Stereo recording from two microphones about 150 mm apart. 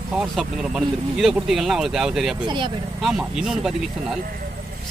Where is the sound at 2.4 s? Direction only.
30° right (ahead or behind).